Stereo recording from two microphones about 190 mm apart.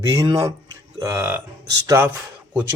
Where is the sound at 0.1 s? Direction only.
20° right (ahead or behind).